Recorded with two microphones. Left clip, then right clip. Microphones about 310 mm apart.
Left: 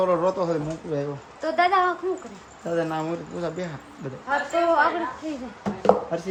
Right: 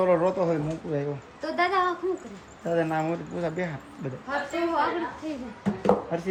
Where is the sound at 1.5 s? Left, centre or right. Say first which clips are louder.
Left 4 dB; left.